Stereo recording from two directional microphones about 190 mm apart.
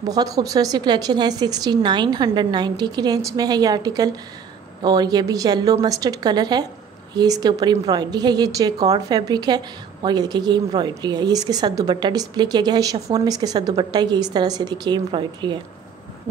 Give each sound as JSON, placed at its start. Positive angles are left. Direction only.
{"t": 0.0, "sound": "a woman's voice", "side_deg": -20}